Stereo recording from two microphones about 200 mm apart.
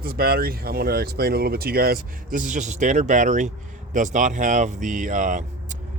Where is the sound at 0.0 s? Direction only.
50° right (ahead or behind).